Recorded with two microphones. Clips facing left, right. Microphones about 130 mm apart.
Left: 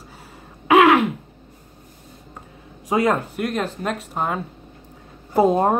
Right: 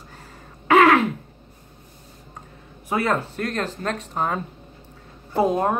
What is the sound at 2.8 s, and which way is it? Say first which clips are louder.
Speech: left 3 dB; 15° left (ahead or behind).